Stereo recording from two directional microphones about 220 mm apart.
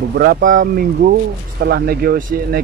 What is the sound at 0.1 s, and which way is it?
Speech, 45° right (ahead or behind).